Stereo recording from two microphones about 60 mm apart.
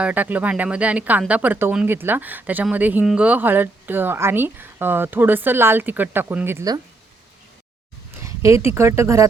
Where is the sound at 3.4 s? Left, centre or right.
Right.